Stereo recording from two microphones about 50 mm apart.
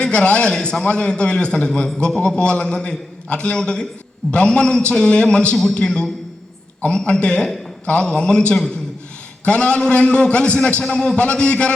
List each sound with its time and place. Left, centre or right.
0.0 s a man's voice: left